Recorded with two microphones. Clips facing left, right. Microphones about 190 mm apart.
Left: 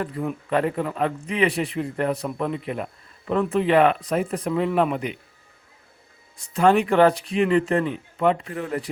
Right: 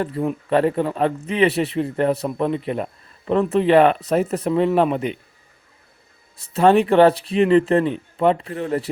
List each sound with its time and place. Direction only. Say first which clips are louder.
0.0 s a man's voice: right 4 dB; 30° right (ahead or behind)
6.6 s a man's voice: right 3 dB; 30° right (ahead or behind)